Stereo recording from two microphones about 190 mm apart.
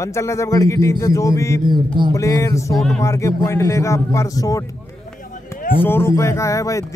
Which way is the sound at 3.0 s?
15° left (ahead or behind).